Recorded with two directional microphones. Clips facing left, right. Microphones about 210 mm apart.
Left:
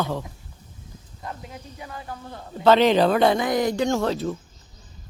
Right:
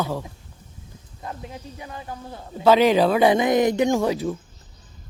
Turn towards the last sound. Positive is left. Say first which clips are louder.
# right 2 dB
turn(degrees=-10)  # may be behind; listen again after turning